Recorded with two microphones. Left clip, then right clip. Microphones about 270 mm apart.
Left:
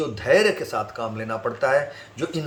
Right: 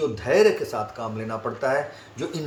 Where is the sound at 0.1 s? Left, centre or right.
Centre.